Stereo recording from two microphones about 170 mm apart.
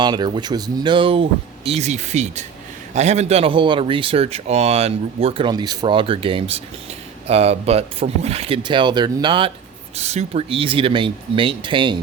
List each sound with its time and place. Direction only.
0.0 s speech: 25° right (ahead or behind)
10.0 s speech: 40° right (ahead or behind)